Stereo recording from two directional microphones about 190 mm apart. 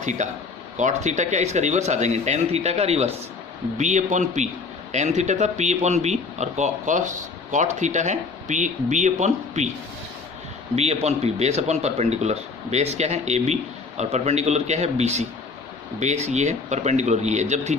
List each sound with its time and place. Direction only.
0.0 s speech: 40° right (ahead or behind)
10.8 s speech: 35° right (ahead or behind)